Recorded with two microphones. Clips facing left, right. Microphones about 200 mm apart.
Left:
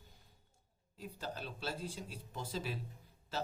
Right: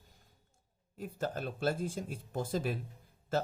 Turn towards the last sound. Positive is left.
turn(degrees=-50)  # may be behind; listen again after turning